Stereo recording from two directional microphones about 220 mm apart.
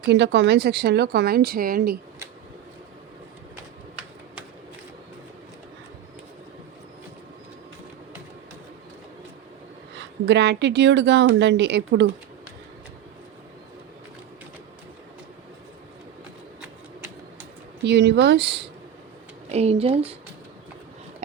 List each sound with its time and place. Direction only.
0.0 s speech: 50° right (ahead or behind)
10.2 s speech: 50° right (ahead or behind)
17.8 s speech: 50° right (ahead or behind)
19.5 s speech: 30° right (ahead or behind)